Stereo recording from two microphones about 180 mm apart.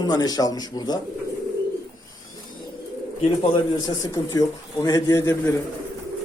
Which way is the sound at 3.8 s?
20° left (ahead or behind).